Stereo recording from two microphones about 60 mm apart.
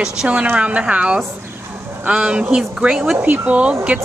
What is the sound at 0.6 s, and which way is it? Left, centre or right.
Speech, right.